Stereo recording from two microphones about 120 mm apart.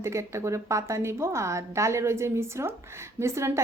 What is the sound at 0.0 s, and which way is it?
A woman's voice, 25° right (ahead or behind).